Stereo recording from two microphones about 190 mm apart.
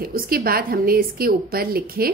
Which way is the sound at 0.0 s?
50° right (ahead or behind).